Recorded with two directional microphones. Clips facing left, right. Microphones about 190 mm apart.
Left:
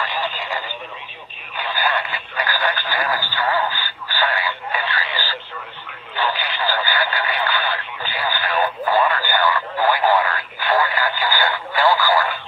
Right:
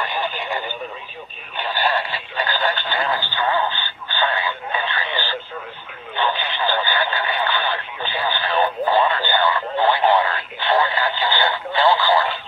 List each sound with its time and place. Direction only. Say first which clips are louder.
0.0 s radio: right 1 dB; 20° right (ahead or behind)
1.6 s a sound: right 1 dB; 25° right (ahead or behind)
6.1 s radio: right 1 dB; 20° right (ahead or behind)